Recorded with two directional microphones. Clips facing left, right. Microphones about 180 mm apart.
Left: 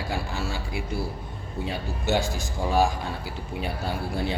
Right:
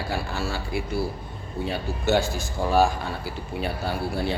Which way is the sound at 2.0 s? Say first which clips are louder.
Right 3 dB; 15° left (ahead or behind).